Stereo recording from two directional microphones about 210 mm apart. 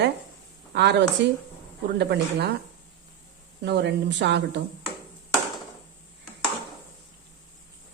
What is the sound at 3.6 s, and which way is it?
Speech, 55° right (ahead or behind).